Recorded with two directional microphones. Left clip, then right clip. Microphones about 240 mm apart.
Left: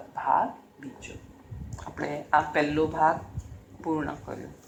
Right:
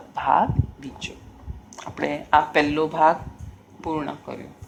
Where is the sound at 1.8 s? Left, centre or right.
Right.